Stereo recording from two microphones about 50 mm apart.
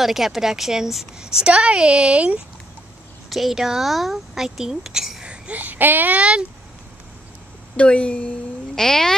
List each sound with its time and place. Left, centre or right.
0.0 s speech: centre; by 2.4 s right
3.3 s speech: centre
5.2 s a sound: right
5.6 s speech: right
6.1 s speech: right
7.7 s speech: left
8.7 s speech: centre